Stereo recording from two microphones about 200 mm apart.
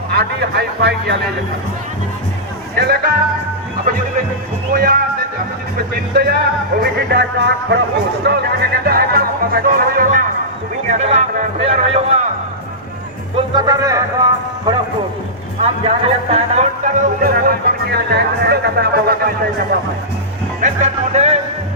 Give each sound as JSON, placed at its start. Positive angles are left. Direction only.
{"t": 0.1, "sound": "speech", "side_deg": -55}
{"t": 2.7, "sound": "speech", "side_deg": -50}
{"t": 4.7, "sound": "speech", "side_deg": -45}
{"t": 6.1, "sound": "speech", "side_deg": -55}
{"t": 13.3, "sound": "speech", "side_deg": -15}
{"t": 15.6, "sound": "speech", "side_deg": -30}
{"t": 17.9, "sound": "speech", "side_deg": -55}
{"t": 20.6, "sound": "speech", "side_deg": -40}